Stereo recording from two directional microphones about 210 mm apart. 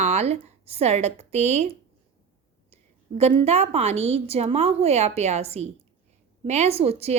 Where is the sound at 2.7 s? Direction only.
30° right (ahead or behind).